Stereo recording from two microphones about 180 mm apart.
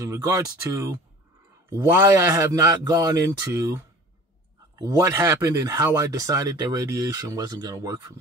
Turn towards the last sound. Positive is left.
turn(degrees=-20)  # may be behind; listen again after turning